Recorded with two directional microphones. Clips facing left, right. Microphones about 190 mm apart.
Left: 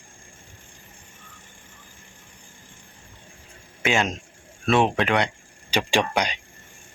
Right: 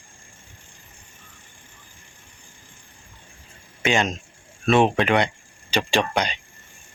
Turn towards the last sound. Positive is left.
turn(degrees=10)  # may be behind; listen again after turning